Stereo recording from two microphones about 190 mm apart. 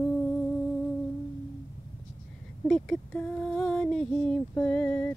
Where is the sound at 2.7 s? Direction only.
5° left (ahead or behind).